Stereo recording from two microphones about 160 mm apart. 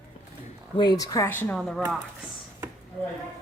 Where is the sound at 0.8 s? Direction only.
25° left (ahead or behind).